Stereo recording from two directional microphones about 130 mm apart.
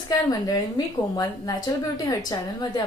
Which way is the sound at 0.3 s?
30° left (ahead or behind).